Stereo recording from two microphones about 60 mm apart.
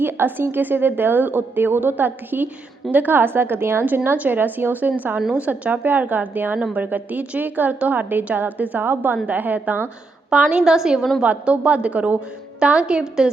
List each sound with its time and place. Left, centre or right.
0.0 s a woman's voice: right
10.2 s a woman's voice: centre
11.2 s a woman's voice: centre